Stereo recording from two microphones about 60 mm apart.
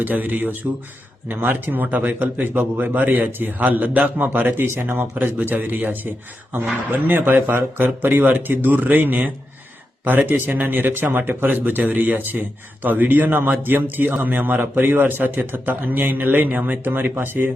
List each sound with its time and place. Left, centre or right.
0.0 s speech: right
4.3 s speech: right